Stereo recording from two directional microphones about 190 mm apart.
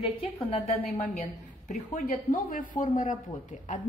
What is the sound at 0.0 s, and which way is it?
Speech, 30° left (ahead or behind).